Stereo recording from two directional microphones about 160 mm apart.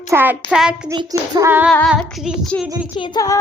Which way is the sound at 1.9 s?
Centre (ahead or behind).